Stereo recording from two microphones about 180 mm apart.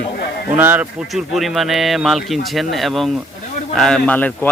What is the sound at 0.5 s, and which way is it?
Speech, 10° right (ahead or behind).